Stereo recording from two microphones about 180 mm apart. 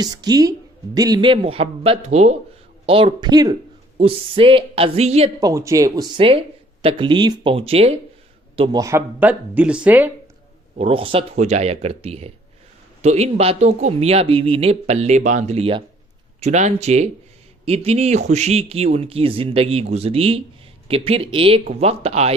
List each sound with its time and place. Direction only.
0.0 s speech: 20° right (ahead or behind)
5.4 s speech: 20° right (ahead or behind)
8.8 s speech: 15° right (ahead or behind)
10.8 s speech: 30° right (ahead or behind)